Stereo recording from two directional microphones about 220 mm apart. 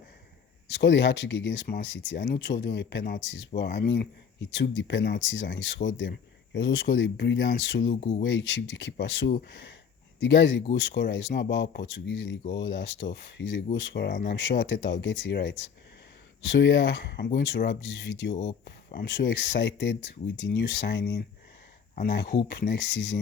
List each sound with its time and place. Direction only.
0.7 s speech: 55° left (ahead or behind)